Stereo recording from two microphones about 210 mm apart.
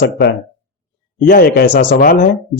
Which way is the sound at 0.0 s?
50° left (ahead or behind).